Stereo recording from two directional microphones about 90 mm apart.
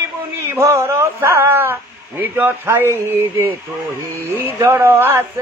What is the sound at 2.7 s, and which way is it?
A man's voice, 30° right (ahead or behind).